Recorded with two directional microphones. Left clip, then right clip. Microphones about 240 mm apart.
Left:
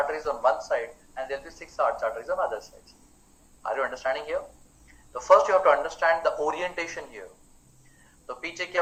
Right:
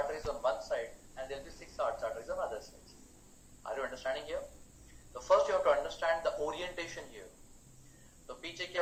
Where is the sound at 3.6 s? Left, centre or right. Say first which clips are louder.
Left 10 dB; left.